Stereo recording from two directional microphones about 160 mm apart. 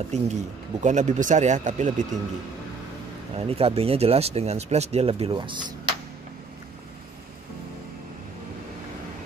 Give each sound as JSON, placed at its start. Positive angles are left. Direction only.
{"t": 0.1, "sound": "speech", "side_deg": -45}
{"t": 3.3, "sound": "speech", "side_deg": -35}